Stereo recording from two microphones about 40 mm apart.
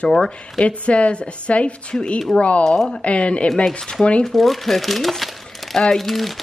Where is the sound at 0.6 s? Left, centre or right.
Left.